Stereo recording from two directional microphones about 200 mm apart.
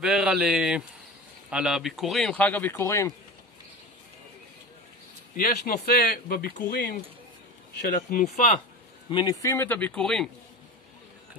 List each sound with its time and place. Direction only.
0.0 s speech: 5° right (ahead or behind); by 3.2 s 15° left (ahead or behind)
5.3 s speech: 45° left (ahead or behind)
7.9 s speech: 40° left (ahead or behind)
9.1 s speech: 20° left (ahead or behind); by 10.3 s 5° left (ahead or behind)